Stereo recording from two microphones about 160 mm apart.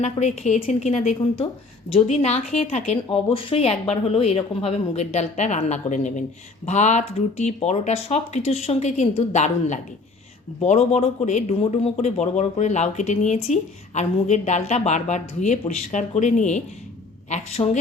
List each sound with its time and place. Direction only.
0.0 s speech: 45° left (ahead or behind)